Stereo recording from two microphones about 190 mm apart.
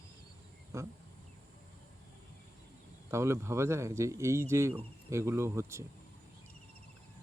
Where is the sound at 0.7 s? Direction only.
15° right (ahead or behind).